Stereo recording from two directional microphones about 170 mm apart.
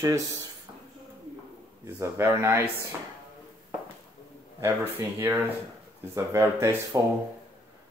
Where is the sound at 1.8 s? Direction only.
15° right (ahead or behind).